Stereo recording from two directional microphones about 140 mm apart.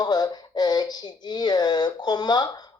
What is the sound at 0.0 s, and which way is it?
Speech, 30° left (ahead or behind).